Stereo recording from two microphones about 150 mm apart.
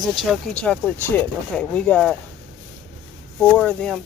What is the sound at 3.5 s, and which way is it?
Speech, 10° left (ahead or behind).